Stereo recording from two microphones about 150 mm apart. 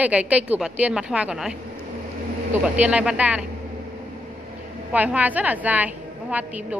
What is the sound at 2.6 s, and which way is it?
Speech, 10° right (ahead or behind).